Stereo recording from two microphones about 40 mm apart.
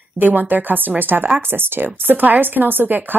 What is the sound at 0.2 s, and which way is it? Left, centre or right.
Speech, right.